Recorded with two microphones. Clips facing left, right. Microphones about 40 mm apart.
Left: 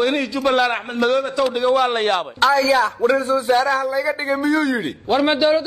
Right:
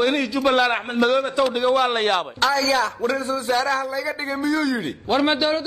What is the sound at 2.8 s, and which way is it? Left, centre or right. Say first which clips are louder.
Speech: left 5 dB; left.